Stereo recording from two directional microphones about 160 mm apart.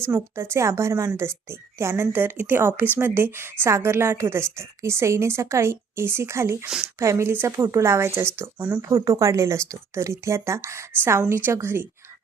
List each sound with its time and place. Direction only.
0.0 s a woman's voice: 15° right (ahead or behind)
6.7 s speech: 5° right (ahead or behind)
7.0 s a woman's voice: 15° right (ahead or behind)